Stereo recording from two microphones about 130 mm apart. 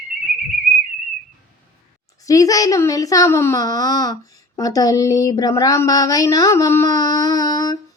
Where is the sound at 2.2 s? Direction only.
25° left (ahead or behind).